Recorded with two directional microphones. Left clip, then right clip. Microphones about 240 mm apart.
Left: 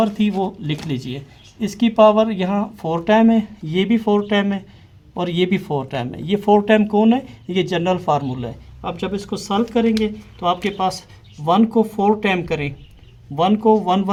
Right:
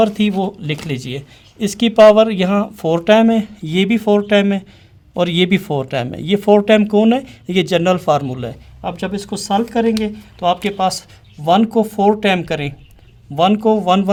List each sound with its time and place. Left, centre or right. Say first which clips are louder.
0.0 s speech: right 4 dB; right